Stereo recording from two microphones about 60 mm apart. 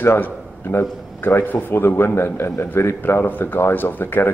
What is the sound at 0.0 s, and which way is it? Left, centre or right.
A man's voice, left.